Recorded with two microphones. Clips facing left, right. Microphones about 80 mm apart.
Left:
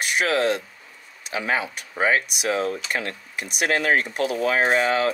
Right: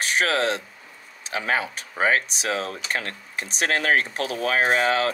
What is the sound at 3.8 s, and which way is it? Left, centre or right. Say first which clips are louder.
Speech: left 1 dB; right.